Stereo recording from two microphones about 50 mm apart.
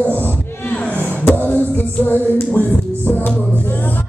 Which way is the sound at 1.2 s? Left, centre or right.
Left.